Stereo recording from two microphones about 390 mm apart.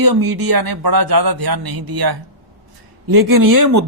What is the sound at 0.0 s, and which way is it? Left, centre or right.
A man's voice, right.